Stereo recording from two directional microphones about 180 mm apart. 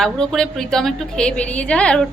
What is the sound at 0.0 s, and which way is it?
A woman's voice, 5° left (ahead or behind).